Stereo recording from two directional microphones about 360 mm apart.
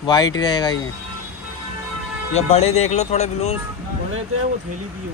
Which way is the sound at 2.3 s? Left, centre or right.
Centre.